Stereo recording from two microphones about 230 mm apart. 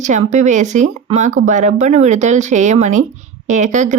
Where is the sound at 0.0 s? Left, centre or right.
Right.